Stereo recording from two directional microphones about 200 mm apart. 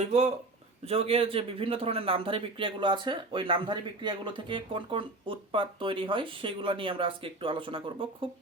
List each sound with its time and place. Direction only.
0.0 s a man's voice: 35° right (ahead or behind)